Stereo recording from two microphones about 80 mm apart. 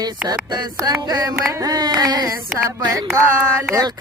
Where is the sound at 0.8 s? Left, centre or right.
Right.